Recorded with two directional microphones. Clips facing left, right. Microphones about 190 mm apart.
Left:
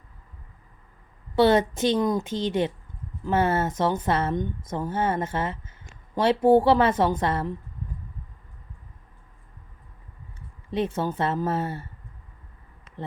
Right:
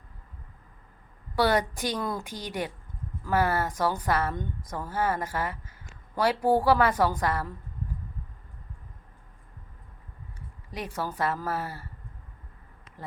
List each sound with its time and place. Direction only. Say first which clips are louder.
1.4 s a woman's voice: left 6 dB; 25° left (ahead or behind)
10.7 s a woman's voice: left 8 dB; 25° left (ahead or behind)